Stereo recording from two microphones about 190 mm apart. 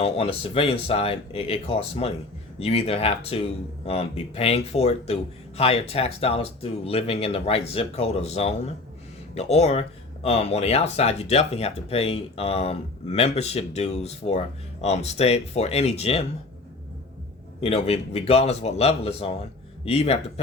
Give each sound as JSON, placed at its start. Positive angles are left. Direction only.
{"t": 0.0, "sound": "speech", "side_deg": 30}
{"t": 17.6, "sound": "speech", "side_deg": 30}